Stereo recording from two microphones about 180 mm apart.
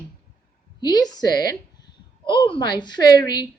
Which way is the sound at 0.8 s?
25° left (ahead or behind).